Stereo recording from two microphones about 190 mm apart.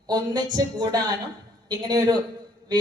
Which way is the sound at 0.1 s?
20° right (ahead or behind).